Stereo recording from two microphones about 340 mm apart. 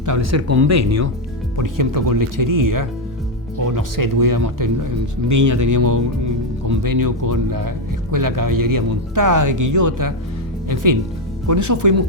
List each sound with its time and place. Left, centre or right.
0.0 s speech: right
1.5 s speech: right
11.4 s speech: right